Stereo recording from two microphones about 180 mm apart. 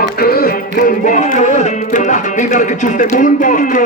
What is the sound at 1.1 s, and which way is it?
Music, 45° left (ahead or behind).